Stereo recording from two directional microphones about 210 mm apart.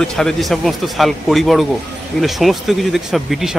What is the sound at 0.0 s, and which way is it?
Speech, 5° left (ahead or behind).